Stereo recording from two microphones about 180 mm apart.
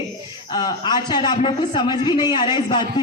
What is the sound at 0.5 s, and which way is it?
A man's voice, 25° left (ahead or behind).